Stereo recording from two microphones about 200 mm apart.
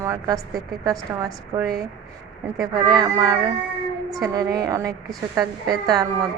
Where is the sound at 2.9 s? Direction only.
20° right (ahead or behind).